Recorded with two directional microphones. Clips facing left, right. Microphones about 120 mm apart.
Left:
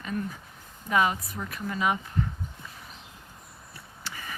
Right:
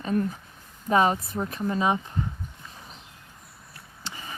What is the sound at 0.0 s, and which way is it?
Speech, 40° right (ahead or behind).